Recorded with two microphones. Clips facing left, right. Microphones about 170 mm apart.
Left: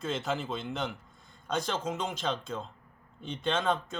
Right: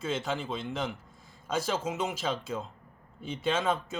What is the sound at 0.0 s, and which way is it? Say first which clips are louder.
A man's voice: even; centre (ahead or behind).